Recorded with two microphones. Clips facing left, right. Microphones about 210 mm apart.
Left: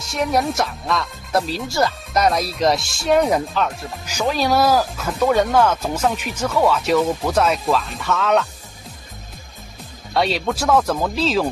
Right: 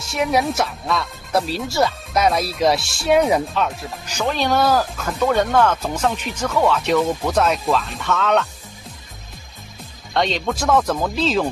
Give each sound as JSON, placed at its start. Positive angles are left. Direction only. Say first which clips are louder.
{"t": 0.0, "sound": "speech", "louder": "right 1 dB", "side_deg": 0}
{"t": 10.1, "sound": "speech", "louder": "left 1 dB", "side_deg": 5}